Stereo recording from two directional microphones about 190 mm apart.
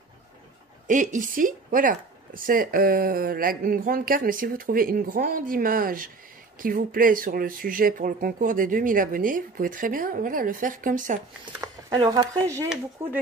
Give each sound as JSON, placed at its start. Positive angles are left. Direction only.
{"t": 0.8, "sound": "speech", "side_deg": -45}
{"t": 11.6, "sound": "speech", "side_deg": -20}